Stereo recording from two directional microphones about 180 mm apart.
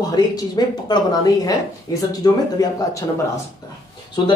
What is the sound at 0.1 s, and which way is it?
Speech, 20° left (ahead or behind).